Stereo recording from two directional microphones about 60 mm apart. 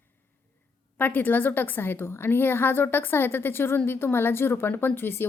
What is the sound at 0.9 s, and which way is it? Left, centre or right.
A woman's voice, left.